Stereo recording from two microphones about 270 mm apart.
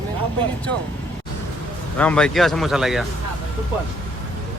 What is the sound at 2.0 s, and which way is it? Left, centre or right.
Speech, centre.